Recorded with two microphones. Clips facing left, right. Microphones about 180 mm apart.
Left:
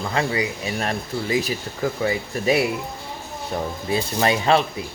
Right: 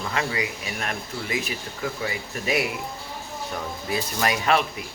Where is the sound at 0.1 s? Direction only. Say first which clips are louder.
Left 5 dB; 30° left (ahead or behind).